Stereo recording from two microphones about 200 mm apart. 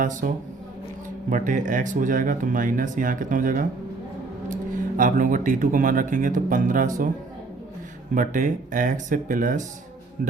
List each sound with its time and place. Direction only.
0.0 s speech: 40° right (ahead or behind)
1.3 s speech: 40° right (ahead or behind)
4.9 s speech: 40° right (ahead or behind)
8.1 s speech: 40° right (ahead or behind)